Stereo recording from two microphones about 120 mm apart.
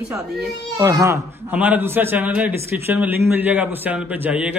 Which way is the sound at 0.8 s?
30° right (ahead or behind).